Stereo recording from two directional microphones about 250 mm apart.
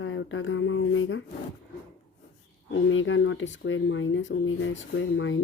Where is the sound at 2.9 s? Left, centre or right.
Left.